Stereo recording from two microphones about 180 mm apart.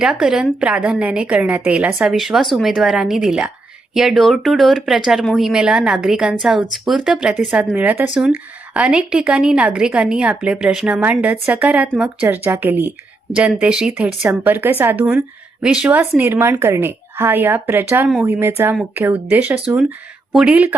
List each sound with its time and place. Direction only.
0.0 s speech: 5° right (ahead or behind)